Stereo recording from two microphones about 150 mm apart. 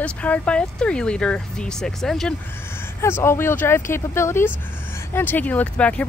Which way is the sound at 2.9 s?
15° left (ahead or behind).